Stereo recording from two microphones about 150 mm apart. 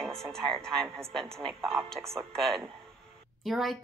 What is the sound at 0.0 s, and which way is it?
Speech, centre (ahead or behind).